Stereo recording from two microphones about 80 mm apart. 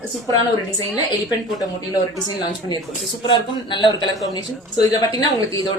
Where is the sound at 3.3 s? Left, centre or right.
Left.